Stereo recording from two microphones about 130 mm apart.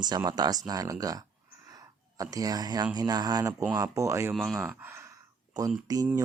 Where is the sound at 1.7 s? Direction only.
25° right (ahead or behind).